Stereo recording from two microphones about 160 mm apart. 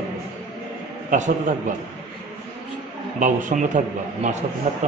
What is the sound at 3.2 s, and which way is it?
A man's voice, 50° right (ahead or behind).